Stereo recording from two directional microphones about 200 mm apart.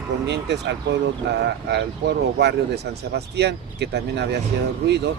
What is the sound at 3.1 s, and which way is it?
Speech, 55° right (ahead or behind).